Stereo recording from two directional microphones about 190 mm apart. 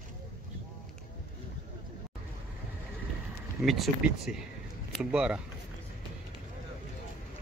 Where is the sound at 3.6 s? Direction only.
Centre (ahead or behind).